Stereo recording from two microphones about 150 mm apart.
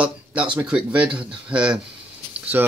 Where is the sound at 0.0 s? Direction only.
10° right (ahead or behind).